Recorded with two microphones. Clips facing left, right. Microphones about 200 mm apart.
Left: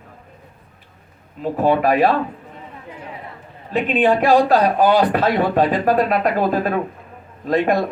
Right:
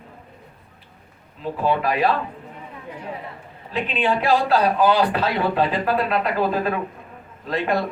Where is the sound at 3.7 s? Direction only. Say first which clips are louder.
Left 6 dB; 45° left (ahead or behind).